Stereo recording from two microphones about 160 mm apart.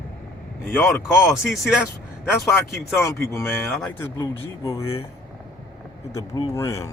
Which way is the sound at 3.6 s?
5° left (ahead or behind).